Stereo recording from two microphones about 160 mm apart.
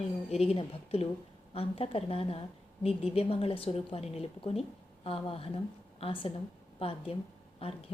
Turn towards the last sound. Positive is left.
turn(degrees=35)  # may be behind; listen again after turning